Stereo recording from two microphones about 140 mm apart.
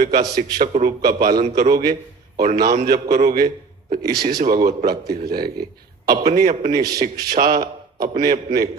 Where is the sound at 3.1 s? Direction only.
75° right (ahead or behind).